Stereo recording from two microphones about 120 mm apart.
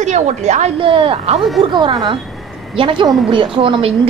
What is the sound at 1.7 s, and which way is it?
Speech, 40° right (ahead or behind).